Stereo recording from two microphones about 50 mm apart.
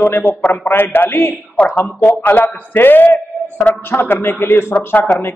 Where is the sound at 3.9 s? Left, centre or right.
Left.